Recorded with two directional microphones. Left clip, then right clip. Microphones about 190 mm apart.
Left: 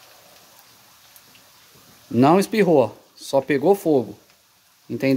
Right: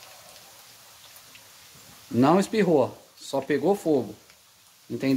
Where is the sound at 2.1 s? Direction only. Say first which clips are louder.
Left 5 dB; 40° left (ahead or behind).